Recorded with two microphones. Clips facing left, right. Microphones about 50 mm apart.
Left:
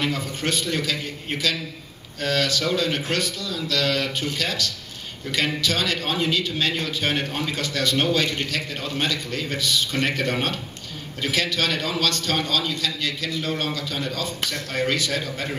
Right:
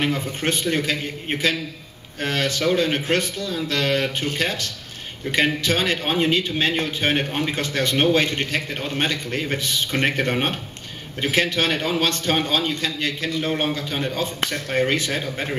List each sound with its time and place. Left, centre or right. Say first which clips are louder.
0.0 s a man's voice: right 2 dB; right